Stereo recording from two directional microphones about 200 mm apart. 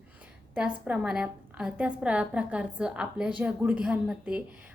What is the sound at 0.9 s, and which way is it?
A woman's voice, 5° right (ahead or behind).